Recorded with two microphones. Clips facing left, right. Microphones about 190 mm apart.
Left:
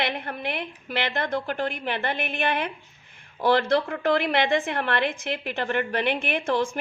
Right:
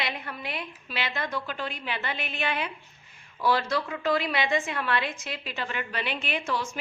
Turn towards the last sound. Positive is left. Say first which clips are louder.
# left 6 dB
turn(degrees=55)  # may be behind; listen again after turning